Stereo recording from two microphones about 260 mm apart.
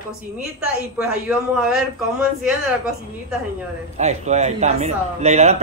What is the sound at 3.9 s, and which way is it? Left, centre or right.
A man's voice, right.